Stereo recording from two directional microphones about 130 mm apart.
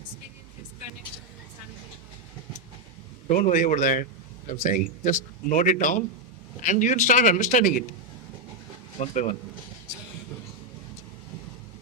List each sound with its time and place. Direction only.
3.2 s a man's voice: 80° left
9.0 s speech: 55° left (ahead or behind)